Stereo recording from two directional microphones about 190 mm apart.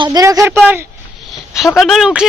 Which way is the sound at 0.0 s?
20° right (ahead or behind).